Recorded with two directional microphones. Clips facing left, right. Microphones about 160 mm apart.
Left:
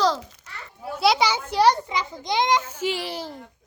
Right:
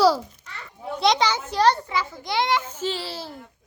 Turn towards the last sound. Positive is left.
turn(degrees=15)  # may be behind; listen again after turning